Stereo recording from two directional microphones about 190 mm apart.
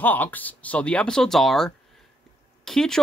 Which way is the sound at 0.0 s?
10° left (ahead or behind).